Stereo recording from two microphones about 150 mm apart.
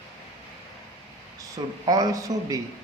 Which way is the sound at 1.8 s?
25° right (ahead or behind).